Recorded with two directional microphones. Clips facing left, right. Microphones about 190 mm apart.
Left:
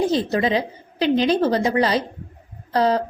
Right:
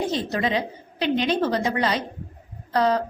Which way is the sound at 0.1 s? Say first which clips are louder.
Left 4 dB; 35° left (ahead or behind).